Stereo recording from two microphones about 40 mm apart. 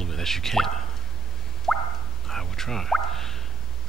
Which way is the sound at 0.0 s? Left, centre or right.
Centre.